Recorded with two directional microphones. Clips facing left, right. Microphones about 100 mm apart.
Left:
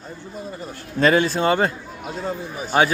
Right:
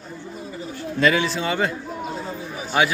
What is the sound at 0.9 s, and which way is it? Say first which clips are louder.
Speech: left 3 dB; 40° left (ahead or behind).